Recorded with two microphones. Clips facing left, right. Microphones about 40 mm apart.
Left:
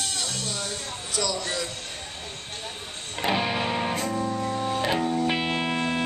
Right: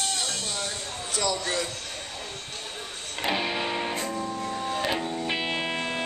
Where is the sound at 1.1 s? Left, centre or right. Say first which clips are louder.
Right 1 dB; right.